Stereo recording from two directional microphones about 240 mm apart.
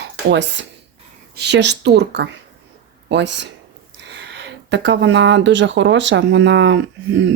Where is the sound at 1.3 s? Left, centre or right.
Right.